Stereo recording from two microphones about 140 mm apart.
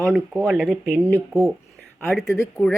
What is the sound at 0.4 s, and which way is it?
Speech, centre (ahead or behind).